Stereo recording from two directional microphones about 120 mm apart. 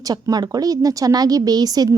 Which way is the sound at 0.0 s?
30° right (ahead or behind).